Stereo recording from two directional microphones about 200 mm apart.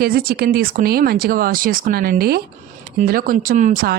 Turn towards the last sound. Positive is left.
turn(degrees=-45)  # may be behind; listen again after turning